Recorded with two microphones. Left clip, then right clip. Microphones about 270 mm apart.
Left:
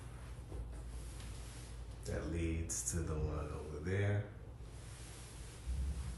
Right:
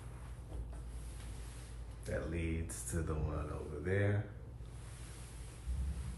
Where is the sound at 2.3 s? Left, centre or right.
Centre.